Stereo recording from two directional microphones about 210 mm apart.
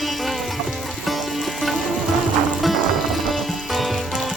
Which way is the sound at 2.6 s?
Centre (ahead or behind).